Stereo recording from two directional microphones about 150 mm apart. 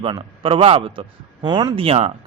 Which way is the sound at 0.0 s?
35° right (ahead or behind).